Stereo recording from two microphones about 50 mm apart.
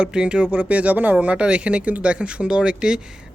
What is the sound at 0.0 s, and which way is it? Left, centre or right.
Speech, centre.